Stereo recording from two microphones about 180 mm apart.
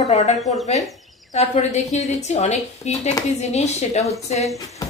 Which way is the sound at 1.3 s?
35° left (ahead or behind).